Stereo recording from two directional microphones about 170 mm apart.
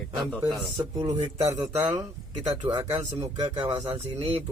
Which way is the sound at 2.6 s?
20° right (ahead or behind).